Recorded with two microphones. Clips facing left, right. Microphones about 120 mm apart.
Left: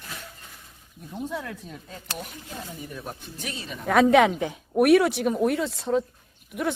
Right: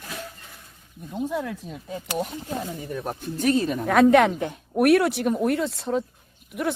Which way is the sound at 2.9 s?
50° right (ahead or behind).